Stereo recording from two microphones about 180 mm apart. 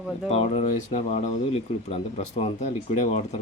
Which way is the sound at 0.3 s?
35° left (ahead or behind).